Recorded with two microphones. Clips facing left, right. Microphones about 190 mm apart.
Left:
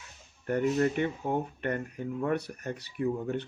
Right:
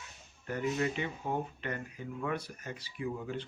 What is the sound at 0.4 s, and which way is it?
Speech, 50° left (ahead or behind).